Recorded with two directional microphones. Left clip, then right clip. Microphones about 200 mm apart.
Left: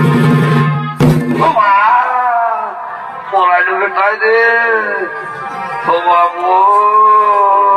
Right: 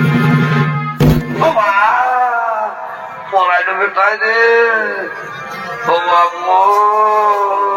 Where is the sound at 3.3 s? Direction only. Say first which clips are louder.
Left 2 dB; 15° right (ahead or behind).